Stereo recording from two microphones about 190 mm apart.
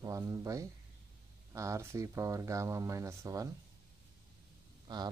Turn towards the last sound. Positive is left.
turn(degrees=-25)  # may be behind; listen again after turning